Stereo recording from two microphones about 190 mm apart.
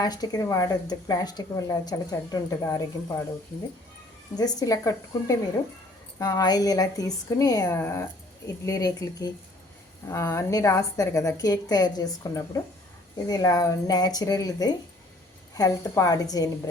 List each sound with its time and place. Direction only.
0.0 s speech: 20° left (ahead or behind)
4.4 s a woman's voice: 20° left (ahead or behind)